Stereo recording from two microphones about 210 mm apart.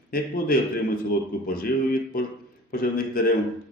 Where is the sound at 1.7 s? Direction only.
45° left (ahead or behind).